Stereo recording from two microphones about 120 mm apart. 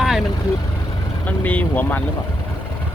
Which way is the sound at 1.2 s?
10° left (ahead or behind).